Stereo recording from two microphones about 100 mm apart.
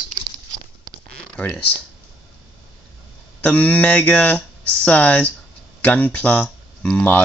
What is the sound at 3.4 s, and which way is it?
Speech, 15° left (ahead or behind).